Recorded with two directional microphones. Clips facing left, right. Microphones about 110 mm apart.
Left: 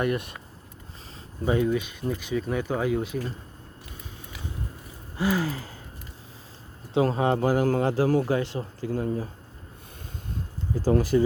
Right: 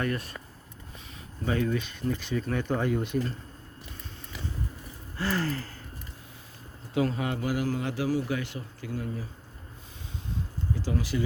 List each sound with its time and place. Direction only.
0.0 s speech: 20° left (ahead or behind)
1.5 s speech: 15° left (ahead or behind)
5.1 s speech: 10° left (ahead or behind)
6.9 s a man's voice: 30° left (ahead or behind)
10.2 s a sound: 45° left (ahead or behind)